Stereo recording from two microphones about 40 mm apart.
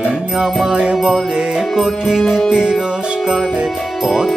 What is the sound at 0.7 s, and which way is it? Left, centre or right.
Music, right.